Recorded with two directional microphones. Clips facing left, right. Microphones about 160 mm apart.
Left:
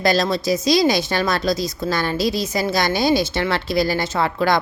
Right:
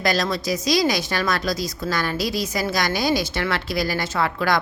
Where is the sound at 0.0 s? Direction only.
25° left (ahead or behind).